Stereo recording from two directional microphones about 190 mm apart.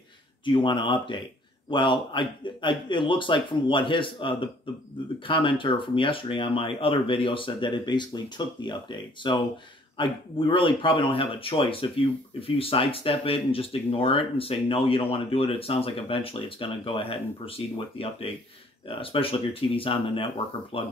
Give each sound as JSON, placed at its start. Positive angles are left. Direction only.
{"t": 0.5, "sound": "speech", "side_deg": 25}